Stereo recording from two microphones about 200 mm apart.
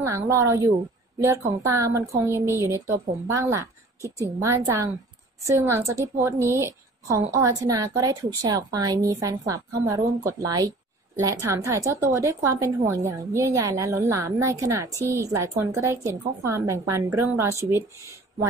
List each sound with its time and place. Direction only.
0.0 s a woman's voice: 15° right (ahead or behind)